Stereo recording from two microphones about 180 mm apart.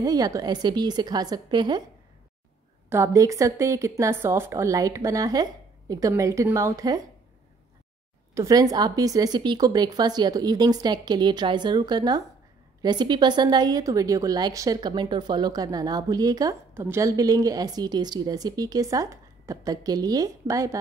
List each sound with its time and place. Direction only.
0.0 s a woman's voice: 20° right (ahead or behind)
2.9 s speech: 15° right (ahead or behind)
8.4 s a woman's voice: 20° right (ahead or behind)